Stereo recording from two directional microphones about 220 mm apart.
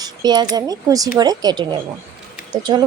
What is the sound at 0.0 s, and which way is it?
Speech, 20° right (ahead or behind).